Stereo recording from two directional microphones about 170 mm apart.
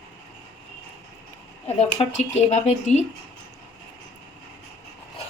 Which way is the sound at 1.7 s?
35° left (ahead or behind).